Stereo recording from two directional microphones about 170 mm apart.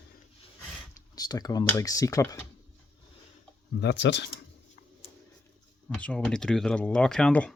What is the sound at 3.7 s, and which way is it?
Speech, 90° left.